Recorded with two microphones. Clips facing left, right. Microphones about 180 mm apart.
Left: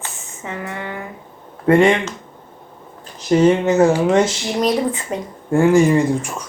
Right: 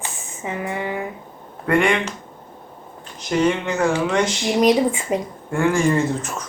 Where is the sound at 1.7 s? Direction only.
25° left (ahead or behind).